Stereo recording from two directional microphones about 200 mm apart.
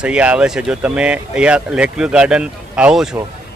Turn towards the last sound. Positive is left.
turn(degrees=-5)  # may be behind; listen again after turning